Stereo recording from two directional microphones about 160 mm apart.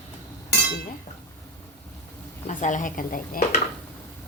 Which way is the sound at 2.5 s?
50° left (ahead or behind).